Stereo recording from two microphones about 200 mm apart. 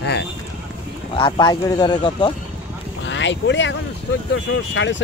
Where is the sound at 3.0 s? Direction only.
65° left (ahead or behind).